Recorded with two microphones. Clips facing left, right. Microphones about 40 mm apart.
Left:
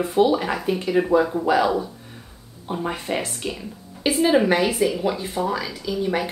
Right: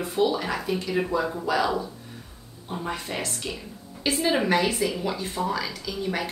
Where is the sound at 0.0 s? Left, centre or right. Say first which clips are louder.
Left 5 dB; left.